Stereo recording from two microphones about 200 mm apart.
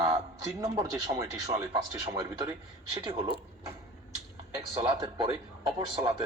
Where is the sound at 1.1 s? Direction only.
15° right (ahead or behind).